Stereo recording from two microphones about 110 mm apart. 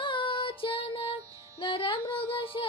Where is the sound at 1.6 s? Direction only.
55° left (ahead or behind).